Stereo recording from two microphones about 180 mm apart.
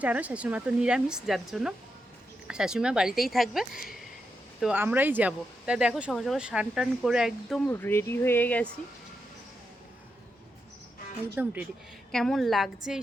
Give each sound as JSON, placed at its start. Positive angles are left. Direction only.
{"t": 0.0, "sound": "speech", "side_deg": -10}
{"t": 7.7, "sound": "speech", "side_deg": 10}
{"t": 11.4, "sound": "speech", "side_deg": -10}
{"t": 12.1, "sound": "speech", "side_deg": 0}